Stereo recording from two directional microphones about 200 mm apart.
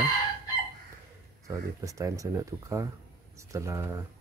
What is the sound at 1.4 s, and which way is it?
Speech, 15° right (ahead or behind).